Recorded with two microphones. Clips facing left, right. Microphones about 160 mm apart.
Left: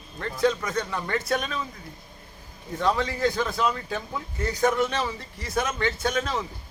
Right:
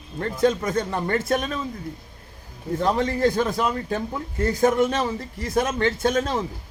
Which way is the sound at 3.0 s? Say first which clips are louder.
Right 4 dB; 50° right (ahead or behind).